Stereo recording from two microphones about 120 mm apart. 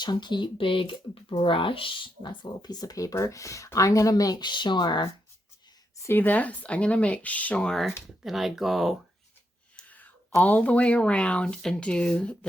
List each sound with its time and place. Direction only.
0.0 s speech: 40° left (ahead or behind)
6.0 s speech: 20° left (ahead or behind); by 9.0 s centre (ahead or behind)
9.7 s a sound: 15° left (ahead or behind)
10.4 s speech: 10° left (ahead or behind)